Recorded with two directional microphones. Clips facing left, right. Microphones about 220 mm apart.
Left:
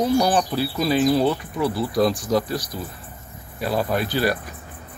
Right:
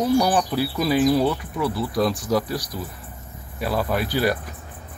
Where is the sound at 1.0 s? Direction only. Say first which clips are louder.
Left 1 dB; 20° left (ahead or behind).